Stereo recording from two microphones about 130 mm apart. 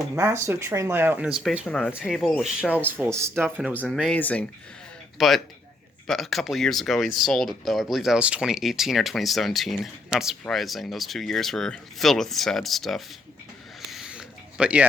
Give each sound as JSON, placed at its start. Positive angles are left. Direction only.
{"t": 0.2, "sound": "speech", "side_deg": -20}
{"t": 1.2, "sound": "speech", "side_deg": -5}
{"t": 1.9, "sound": "speech", "side_deg": -10}
{"t": 2.1, "sound": "speech", "side_deg": 5}
{"t": 2.4, "sound": "speech", "side_deg": -5}
{"t": 4.1, "sound": "speech", "side_deg": 10}
{"t": 5.1, "sound": "speech", "side_deg": 0}
{"t": 13.9, "sound": "a sound", "side_deg": -5}